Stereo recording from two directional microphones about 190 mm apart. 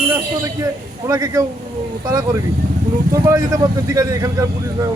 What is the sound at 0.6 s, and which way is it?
A man's voice, 20° right (ahead or behind).